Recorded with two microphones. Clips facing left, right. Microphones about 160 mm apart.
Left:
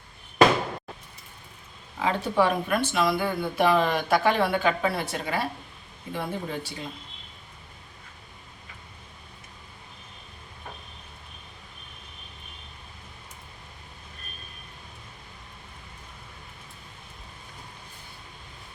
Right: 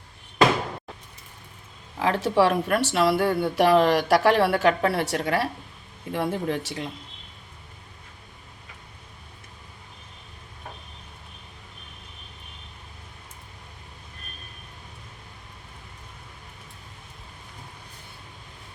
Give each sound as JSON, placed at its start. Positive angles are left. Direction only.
{"t": 2.0, "sound": "speech", "side_deg": -85}
{"t": 2.4, "sound": "speech", "side_deg": -75}